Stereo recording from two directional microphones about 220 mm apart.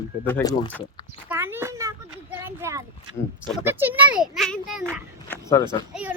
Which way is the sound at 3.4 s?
5° right (ahead or behind).